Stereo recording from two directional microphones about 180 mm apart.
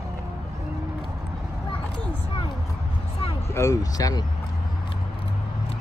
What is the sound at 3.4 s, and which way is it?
Speech, 15° left (ahead or behind).